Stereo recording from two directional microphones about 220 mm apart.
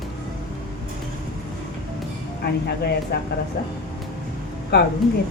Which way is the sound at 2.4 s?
45° left (ahead or behind).